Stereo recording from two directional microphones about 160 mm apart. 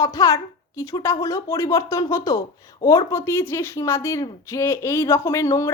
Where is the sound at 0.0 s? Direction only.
20° left (ahead or behind).